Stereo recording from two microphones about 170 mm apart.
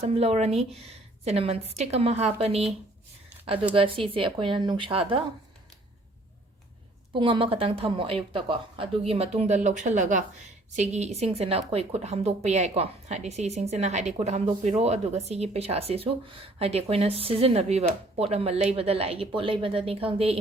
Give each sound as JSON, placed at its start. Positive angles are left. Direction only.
{"t": 0.0, "sound": "a woman's voice", "side_deg": -35}
{"t": 7.1, "sound": "a woman's voice", "side_deg": -30}